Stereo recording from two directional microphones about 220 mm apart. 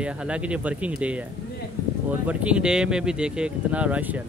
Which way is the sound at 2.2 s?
5° right (ahead or behind).